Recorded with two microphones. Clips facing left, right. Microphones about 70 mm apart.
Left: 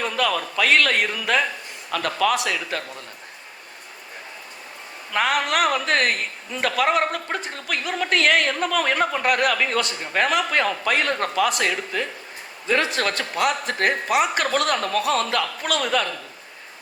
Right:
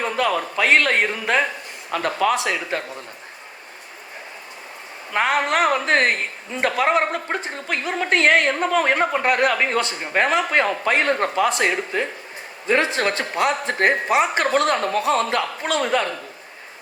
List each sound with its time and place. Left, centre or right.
0.0 s a man's voice: right
5.1 s a man's voice: right